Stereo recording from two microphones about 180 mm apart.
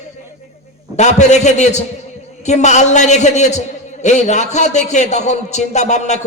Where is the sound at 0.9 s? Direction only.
40° left (ahead or behind).